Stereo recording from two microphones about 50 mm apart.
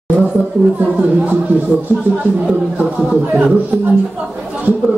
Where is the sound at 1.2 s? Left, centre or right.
Right.